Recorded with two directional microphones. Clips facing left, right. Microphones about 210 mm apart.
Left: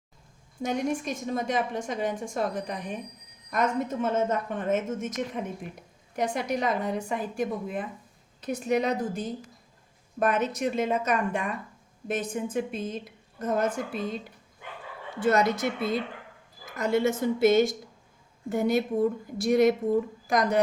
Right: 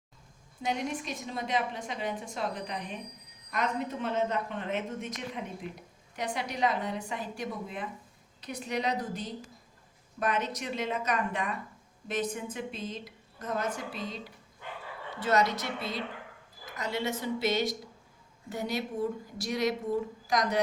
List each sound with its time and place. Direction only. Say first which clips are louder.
0.6 s a woman's voice: left 5 dB; 45° left (ahead or behind)
15.2 s a woman's voice: left 4 dB; 50° left (ahead or behind)